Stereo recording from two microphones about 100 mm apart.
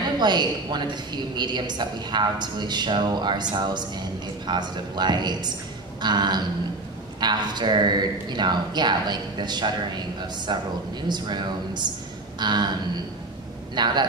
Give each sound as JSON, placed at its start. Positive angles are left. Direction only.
{"t": 0.2, "sound": "a woman's voice", "side_deg": -45}